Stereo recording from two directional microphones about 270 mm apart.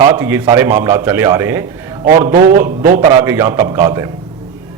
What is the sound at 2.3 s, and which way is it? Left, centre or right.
Speech, right.